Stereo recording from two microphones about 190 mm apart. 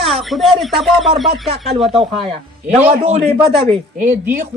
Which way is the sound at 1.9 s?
30° right (ahead or behind).